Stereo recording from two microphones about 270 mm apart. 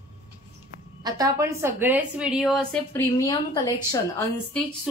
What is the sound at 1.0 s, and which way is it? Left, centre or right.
A woman's voice, centre.